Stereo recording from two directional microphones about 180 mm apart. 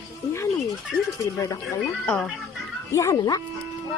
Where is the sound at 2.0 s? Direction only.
5° left (ahead or behind).